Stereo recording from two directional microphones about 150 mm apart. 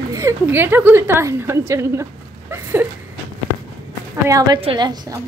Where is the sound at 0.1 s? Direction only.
20° right (ahead or behind).